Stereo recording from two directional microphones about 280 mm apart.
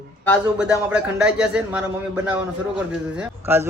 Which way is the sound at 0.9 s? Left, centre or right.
Centre.